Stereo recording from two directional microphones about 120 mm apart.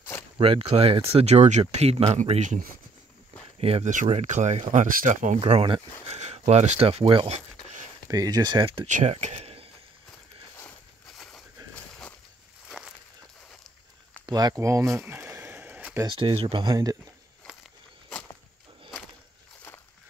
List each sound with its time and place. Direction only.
0.4 s speech: 50° right (ahead or behind); by 2.6 s 75° right (ahead or behind)
3.5 s speech: 55° right (ahead or behind)
3.8 s speech: 90° right
4.1 s speech: 70° right (ahead or behind); by 5.4 s 90° right
5.4 s speech: 50° right (ahead or behind)
6.0 s speech: 60° right (ahead or behind)
8.1 s speech: 35° right (ahead or behind)
8.8 s speech: 85° right; by 9.7 s 55° right (ahead or behind)
11.1 s a sound: centre (ahead or behind)
12.6 s a sound: 5° right (ahead or behind)
14.2 s speech: 35° right (ahead or behind)
15.0 s a sound: 20° right (ahead or behind)
16.1 s speech: 45° right (ahead or behind)
16.6 s speech: 30° right (ahead or behind)